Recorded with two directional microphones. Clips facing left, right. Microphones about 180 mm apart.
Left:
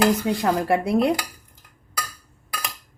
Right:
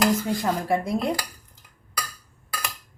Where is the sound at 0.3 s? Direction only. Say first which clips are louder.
Left 3 dB; 70° left (ahead or behind).